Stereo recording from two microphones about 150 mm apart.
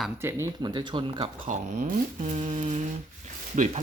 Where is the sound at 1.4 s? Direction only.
55° right (ahead or behind).